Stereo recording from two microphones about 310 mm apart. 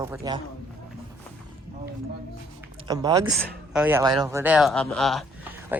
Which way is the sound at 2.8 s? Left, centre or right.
Centre.